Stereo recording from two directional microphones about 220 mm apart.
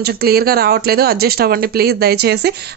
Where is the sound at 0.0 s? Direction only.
45° right (ahead or behind).